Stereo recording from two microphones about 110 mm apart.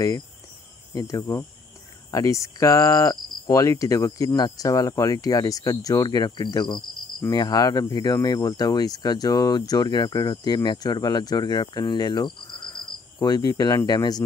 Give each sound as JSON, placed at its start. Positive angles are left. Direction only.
{"t": 0.9, "sound": "speech", "side_deg": 25}